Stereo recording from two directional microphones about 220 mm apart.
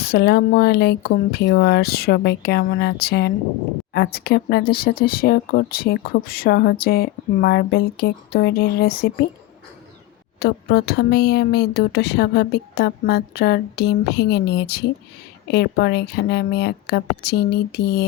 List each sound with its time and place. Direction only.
0.0 s speech: 45° left (ahead or behind)
10.4 s speech: 45° left (ahead or behind)